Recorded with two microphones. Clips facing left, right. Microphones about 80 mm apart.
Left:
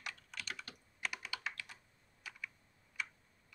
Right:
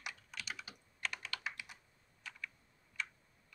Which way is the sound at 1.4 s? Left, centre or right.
Centre.